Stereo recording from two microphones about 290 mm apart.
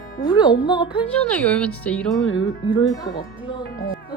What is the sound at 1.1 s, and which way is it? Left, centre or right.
Speech, centre.